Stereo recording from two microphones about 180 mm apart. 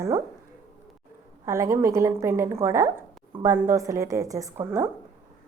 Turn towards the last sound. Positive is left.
turn(degrees=-15)  # may be behind; listen again after turning